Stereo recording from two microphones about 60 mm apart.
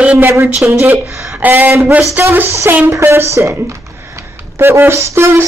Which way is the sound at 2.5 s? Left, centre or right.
Right.